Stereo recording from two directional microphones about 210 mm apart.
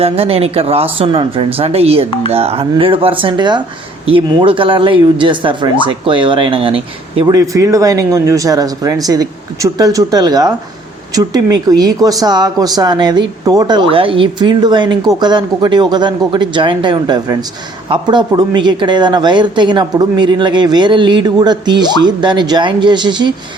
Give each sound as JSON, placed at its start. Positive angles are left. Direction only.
{"t": 0.0, "sound": "speech", "side_deg": -30}